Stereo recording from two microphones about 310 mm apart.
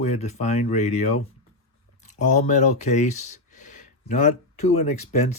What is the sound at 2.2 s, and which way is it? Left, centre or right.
Speech, left.